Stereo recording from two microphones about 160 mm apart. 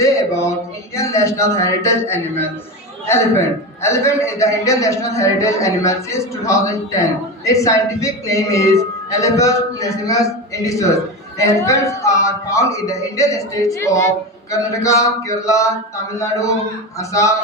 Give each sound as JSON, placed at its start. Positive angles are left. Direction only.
{"t": 0.0, "sound": "a sound", "side_deg": 20}
{"t": 0.9, "sound": "speech", "side_deg": 20}
{"t": 3.8, "sound": "a man's voice", "side_deg": 15}